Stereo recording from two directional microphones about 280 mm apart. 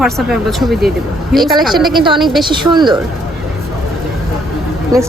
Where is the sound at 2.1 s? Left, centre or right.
Centre.